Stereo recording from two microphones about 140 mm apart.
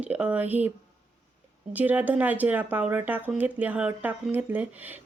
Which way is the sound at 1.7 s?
10° right (ahead or behind).